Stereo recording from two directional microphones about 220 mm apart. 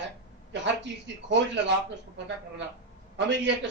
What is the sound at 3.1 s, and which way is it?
Speech, 55° right (ahead or behind).